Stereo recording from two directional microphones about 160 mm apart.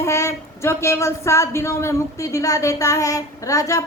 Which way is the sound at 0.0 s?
20° left (ahead or behind).